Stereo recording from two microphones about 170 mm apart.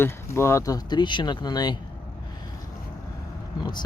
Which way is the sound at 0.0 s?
15° left (ahead or behind).